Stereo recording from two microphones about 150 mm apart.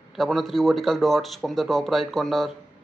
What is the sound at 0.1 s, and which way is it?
Speech, centre (ahead or behind).